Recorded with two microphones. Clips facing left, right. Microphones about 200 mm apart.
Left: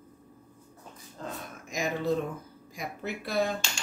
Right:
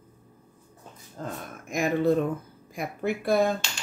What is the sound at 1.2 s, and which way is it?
A woman's voice, 45° right (ahead or behind).